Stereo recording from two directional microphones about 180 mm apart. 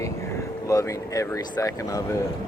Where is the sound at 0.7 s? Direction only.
20° left (ahead or behind).